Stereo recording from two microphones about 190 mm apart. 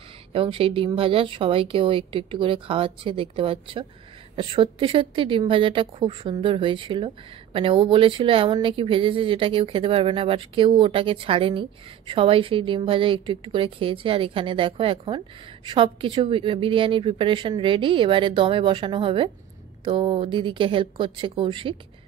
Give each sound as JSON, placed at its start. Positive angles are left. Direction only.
{"t": 0.3, "sound": "speech", "side_deg": -30}